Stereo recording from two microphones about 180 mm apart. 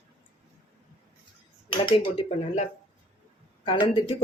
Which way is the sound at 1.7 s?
30° left (ahead or behind).